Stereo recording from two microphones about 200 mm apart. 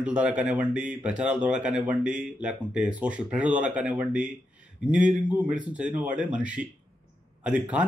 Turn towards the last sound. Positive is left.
turn(degrees=-5)  # may be behind; listen again after turning